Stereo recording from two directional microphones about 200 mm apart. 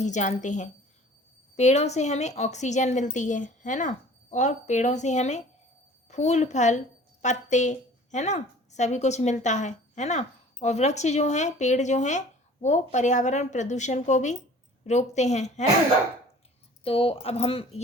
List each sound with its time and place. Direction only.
0.0 s a woman's voice: 35° left (ahead or behind)
16.8 s speech: 30° left (ahead or behind)